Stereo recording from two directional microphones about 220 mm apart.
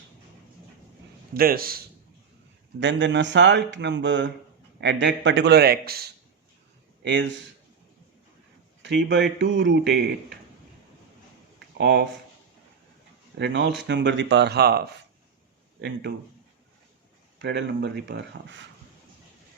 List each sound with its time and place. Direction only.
1.3 s speech: 40° right (ahead or behind)
2.8 s speech: 55° right (ahead or behind)
8.8 s speech: 55° right (ahead or behind)
11.8 s speech: 50° right (ahead or behind)
13.4 s speech: 55° right (ahead or behind)
17.4 s speech: 50° right (ahead or behind)